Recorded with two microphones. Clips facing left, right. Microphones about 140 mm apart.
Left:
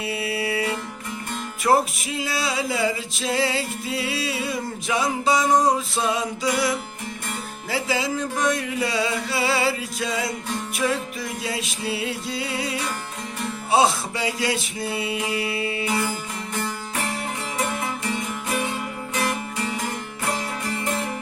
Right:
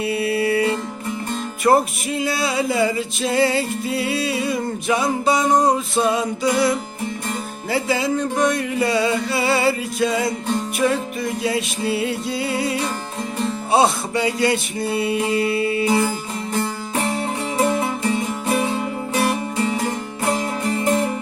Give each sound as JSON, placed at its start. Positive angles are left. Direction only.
{"t": 0.0, "sound": "music", "side_deg": 0}
{"t": 15.9, "sound": "music", "side_deg": -30}
{"t": 17.6, "sound": "music", "side_deg": -30}